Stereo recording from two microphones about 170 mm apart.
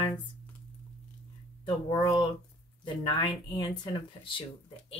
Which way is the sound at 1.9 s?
25° left (ahead or behind).